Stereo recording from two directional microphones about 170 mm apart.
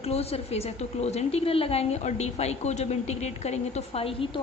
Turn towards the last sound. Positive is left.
turn(degrees=35)  # may be behind; listen again after turning